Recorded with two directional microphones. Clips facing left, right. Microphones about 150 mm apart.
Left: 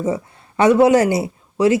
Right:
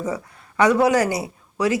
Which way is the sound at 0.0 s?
25° left (ahead or behind).